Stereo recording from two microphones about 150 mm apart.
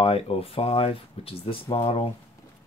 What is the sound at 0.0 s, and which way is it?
Speech, 40° left (ahead or behind).